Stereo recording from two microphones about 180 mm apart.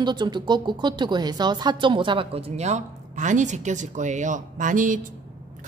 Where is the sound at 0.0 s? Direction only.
25° right (ahead or behind).